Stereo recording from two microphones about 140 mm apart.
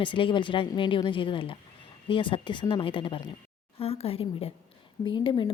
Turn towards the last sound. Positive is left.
turn(degrees=35)  # may be behind; listen again after turning